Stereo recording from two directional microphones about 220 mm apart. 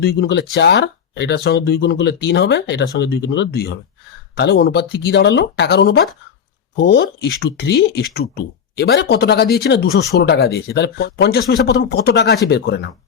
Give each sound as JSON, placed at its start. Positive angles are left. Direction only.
{"t": 0.0, "sound": "speech", "side_deg": 45}